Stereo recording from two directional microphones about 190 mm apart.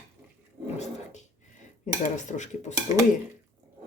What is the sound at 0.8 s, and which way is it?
Cutlery, 40° left (ahead or behind).